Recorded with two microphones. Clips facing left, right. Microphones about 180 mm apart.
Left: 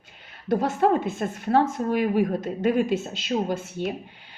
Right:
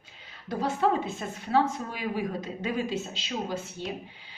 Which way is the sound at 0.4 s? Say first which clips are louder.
Left 5 dB; 50° left (ahead or behind).